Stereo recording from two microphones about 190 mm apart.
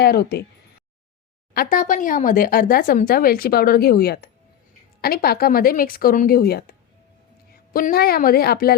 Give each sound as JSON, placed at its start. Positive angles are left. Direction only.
{"t": 0.0, "sound": "speech", "side_deg": 55}
{"t": 1.5, "sound": "speech", "side_deg": 45}
{"t": 7.7, "sound": "speech", "side_deg": 50}